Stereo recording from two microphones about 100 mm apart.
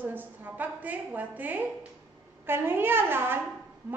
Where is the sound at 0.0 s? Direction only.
20° right (ahead or behind).